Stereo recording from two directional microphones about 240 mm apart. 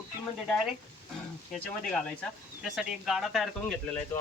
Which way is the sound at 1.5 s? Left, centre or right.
Centre.